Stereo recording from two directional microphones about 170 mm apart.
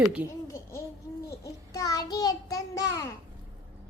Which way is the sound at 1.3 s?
20° left (ahead or behind).